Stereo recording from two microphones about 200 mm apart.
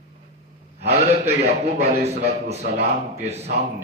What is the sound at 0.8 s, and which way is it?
A man's voice, 30° right (ahead or behind).